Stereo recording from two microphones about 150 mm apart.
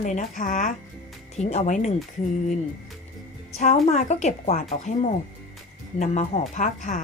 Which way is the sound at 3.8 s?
50° left (ahead or behind).